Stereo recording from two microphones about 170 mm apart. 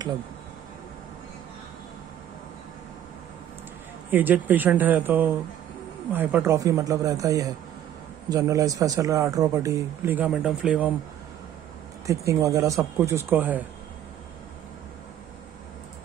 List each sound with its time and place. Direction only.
4.1 s speech: 10° right (ahead or behind)
12.1 s speech: 20° right (ahead or behind)